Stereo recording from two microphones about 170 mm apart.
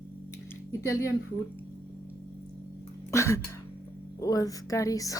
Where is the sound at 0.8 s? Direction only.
20° left (ahead or behind).